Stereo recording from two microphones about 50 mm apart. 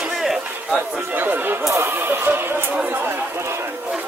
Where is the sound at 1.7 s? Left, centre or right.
Right.